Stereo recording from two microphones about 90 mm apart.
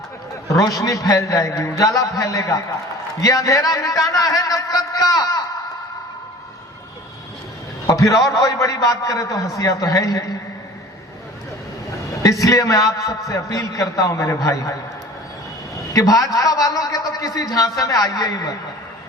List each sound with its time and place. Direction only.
0.4 s a man's voice: 40° left (ahead or behind)
7.9 s a man's voice: 40° left (ahead or behind)
12.2 s a man's voice: 40° left (ahead or behind)
15.9 s a man's voice: 40° left (ahead or behind)